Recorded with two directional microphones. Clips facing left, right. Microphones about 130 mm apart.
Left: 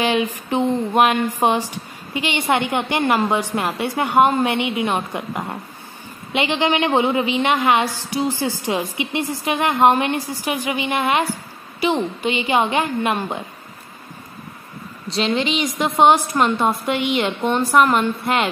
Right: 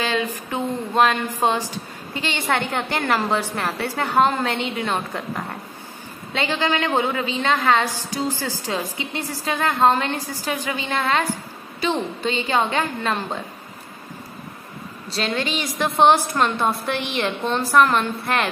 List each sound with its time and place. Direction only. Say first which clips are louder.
0.0 s a woman's voice: left 4 dB; 15° left (ahead or behind)
15.2 s a woman's voice: left 4 dB; 20° left (ahead or behind)